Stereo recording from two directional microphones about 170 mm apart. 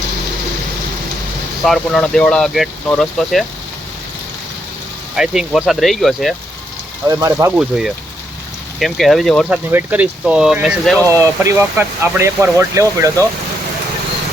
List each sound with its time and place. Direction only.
1.6 s speech: centre (ahead or behind)
5.1 s speech: 5° right (ahead or behind)
7.1 s speech: 15° right (ahead or behind)
7.5 s speech: 5° right (ahead or behind)
11.0 s speech: 20° right (ahead or behind)